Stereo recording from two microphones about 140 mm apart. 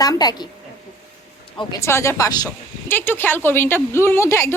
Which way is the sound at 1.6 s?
20° left (ahead or behind).